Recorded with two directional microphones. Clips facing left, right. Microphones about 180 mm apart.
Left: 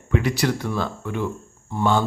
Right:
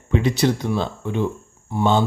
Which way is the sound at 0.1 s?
25° right (ahead or behind).